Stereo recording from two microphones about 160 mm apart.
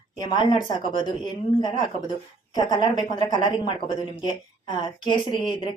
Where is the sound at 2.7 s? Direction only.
25° left (ahead or behind).